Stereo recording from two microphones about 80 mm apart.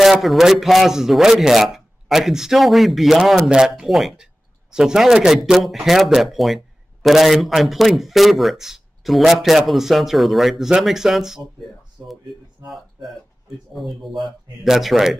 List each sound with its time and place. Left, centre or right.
0.0 s speech: centre
3.3 s speech: centre
13.7 s speech: centre